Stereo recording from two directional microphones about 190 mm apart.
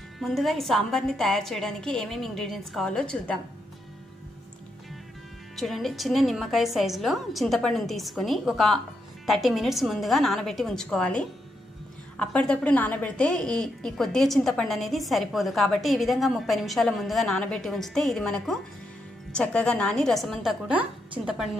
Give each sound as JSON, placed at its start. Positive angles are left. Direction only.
{"t": 0.2, "sound": "a woman's voice", "side_deg": 0}
{"t": 5.6, "sound": "a woman's voice", "side_deg": 0}